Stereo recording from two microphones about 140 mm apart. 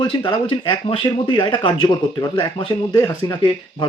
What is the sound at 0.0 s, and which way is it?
Speech, 30° left (ahead or behind).